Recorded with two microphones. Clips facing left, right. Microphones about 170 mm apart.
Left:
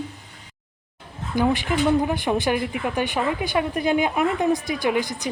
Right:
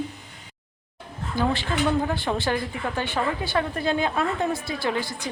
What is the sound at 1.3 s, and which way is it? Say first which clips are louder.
A woman's voice: left 4 dB; 15° left (ahead or behind).